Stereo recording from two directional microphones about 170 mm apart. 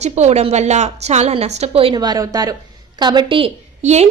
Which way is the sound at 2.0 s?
20° right (ahead or behind).